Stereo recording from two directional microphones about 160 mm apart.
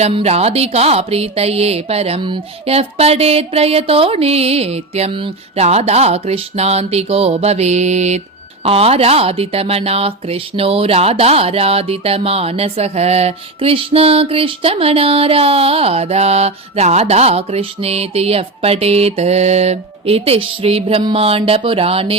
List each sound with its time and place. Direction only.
0.0 s speech: 40° right (ahead or behind)